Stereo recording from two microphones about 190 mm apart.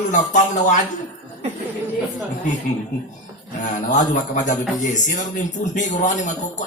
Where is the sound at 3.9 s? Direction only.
40° left (ahead or behind).